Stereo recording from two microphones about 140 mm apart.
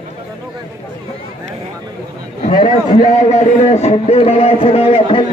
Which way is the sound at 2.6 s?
75° left (ahead or behind).